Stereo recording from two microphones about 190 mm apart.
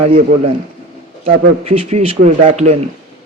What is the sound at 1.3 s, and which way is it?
A man's voice, 30° right (ahead or behind).